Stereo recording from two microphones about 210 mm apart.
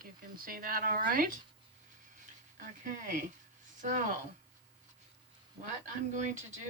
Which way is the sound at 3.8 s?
35° right (ahead or behind).